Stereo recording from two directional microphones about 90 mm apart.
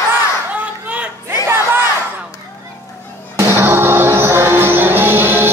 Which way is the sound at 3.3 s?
30° right (ahead or behind).